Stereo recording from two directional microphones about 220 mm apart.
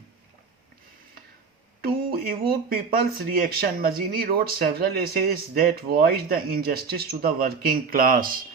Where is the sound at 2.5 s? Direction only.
40° right (ahead or behind).